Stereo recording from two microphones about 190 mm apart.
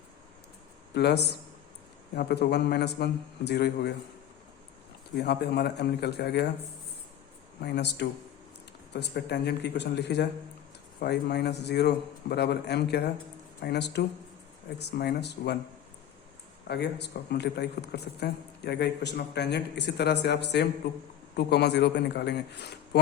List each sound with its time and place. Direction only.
0.9 s speech: 60° left (ahead or behind)
5.1 s speech: 60° left (ahead or behind)
7.6 s speech: 60° left (ahead or behind)
16.6 s speech: 60° left (ahead or behind)